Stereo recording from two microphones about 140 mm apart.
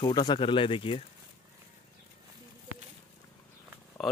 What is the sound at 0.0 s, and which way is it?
Speech, 30° left (ahead or behind).